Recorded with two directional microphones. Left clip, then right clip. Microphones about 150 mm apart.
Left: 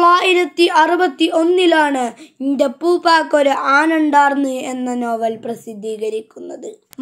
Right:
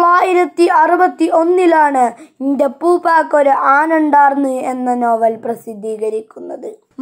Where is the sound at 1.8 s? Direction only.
35° left (ahead or behind).